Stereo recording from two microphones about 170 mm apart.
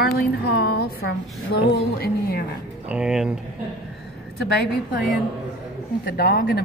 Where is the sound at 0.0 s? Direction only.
65° left (ahead or behind).